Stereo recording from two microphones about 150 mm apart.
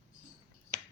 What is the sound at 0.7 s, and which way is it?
Finger snapping, 70° right (ahead or behind).